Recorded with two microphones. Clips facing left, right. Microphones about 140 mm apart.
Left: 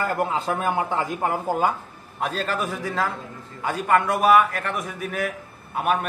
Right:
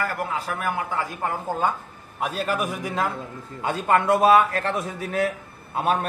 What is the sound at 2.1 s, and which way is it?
A man's voice, 10° right (ahead or behind).